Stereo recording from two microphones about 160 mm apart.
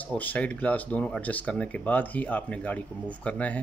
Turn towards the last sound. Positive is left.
turn(degrees=10)  # may be behind; listen again after turning